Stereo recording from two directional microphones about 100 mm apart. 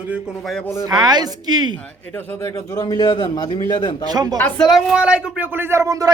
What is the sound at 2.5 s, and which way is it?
A man's voice, 35° left (ahead or behind).